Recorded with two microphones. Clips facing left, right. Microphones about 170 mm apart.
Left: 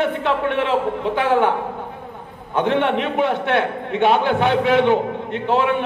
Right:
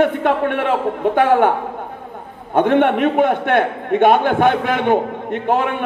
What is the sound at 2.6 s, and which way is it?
A man's voice, 50° right (ahead or behind).